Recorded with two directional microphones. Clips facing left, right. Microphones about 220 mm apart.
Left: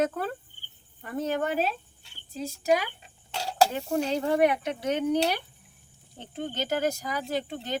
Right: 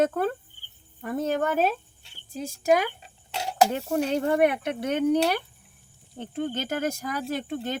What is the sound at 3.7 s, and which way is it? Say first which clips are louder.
Speech: right 2 dB; 55° right (ahead or behind).